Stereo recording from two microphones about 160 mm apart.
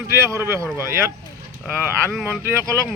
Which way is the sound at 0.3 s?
20° right (ahead or behind).